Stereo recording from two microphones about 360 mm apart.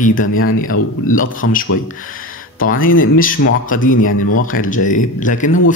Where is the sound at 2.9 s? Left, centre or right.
Left.